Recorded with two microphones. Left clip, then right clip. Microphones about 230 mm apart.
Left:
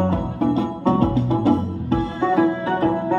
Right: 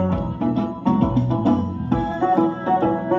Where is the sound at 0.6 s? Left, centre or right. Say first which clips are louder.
Left 1 dB; left.